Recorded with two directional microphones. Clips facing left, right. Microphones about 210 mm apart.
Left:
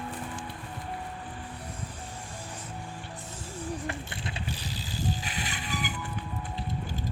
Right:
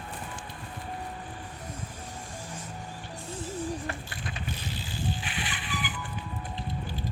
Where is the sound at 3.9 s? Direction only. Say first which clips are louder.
Left 1 dB; 25° left (ahead or behind); by 5.9 s 40° left (ahead or behind).